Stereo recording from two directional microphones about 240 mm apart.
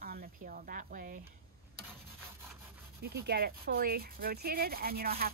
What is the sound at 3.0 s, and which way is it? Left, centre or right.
Speech, right.